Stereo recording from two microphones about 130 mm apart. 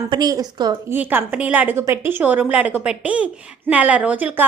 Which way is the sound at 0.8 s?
15° right (ahead or behind).